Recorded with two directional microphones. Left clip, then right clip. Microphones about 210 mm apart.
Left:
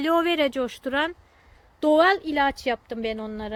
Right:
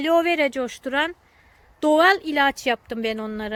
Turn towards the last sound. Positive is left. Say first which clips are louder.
# right 3 dB
turn(degrees=-25)  # may be behind; listen again after turning